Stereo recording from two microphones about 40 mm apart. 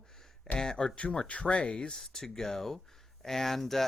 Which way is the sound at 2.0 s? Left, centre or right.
Centre.